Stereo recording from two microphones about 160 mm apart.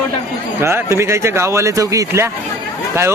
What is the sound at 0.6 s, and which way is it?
A man's voice, 15° right (ahead or behind).